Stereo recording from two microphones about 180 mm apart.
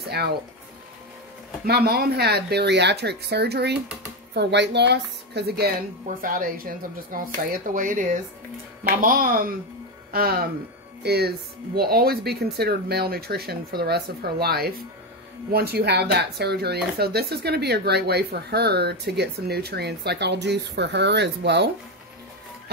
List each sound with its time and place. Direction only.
1.7 s a woman's voice: 60° right (ahead or behind)
6.0 s speech: 50° right (ahead or behind); by 21.6 s 70° right (ahead or behind)